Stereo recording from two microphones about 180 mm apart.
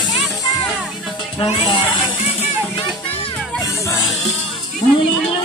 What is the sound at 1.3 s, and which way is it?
Speech, 30° left (ahead or behind).